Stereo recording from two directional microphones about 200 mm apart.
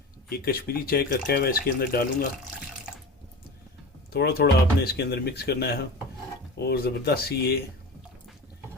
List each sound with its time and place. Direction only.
0.3 s speech: 50° left (ahead or behind)
4.1 s speech: 55° left (ahead or behind)